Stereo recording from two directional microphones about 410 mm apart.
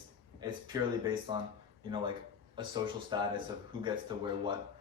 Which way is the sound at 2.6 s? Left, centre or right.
Centre.